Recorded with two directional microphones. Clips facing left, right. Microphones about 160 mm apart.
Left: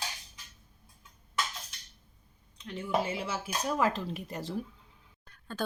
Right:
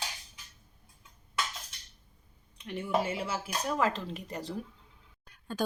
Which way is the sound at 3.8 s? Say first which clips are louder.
Left 1 dB; 10° left (ahead or behind).